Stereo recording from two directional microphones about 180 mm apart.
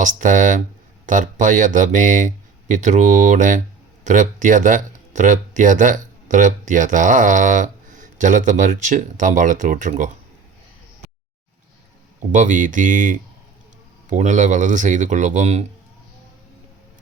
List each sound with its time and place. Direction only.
0.0 s speech: 45° right (ahead or behind)
12.3 s speech: 45° right (ahead or behind)